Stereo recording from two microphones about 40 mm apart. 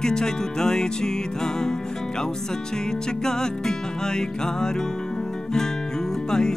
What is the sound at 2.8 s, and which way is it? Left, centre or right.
Music, centre.